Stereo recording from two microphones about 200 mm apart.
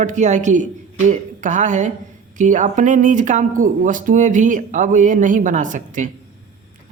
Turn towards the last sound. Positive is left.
turn(degrees=-40)  # may be behind; listen again after turning